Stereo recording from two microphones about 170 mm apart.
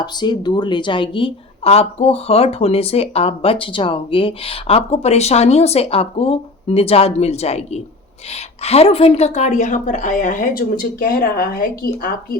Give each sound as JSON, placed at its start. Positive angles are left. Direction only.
{"t": 0.0, "sound": "a woman's voice", "side_deg": 25}